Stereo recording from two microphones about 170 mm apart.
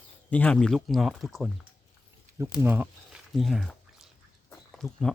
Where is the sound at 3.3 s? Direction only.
Centre (ahead or behind).